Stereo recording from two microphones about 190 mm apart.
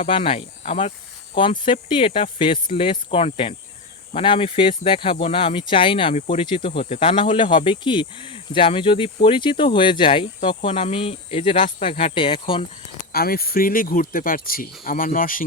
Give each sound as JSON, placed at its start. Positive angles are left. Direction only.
{"t": 0.0, "sound": "speech", "side_deg": 30}
{"t": 13.1, "sound": "speech", "side_deg": 50}